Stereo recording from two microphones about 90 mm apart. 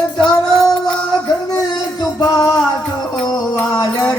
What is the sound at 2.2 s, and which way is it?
Music, 45° left (ahead or behind).